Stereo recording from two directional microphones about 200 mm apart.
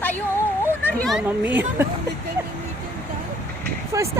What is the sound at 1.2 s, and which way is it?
Speech, 10° right (ahead or behind).